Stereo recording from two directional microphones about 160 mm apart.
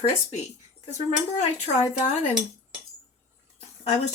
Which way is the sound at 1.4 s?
45° left (ahead or behind).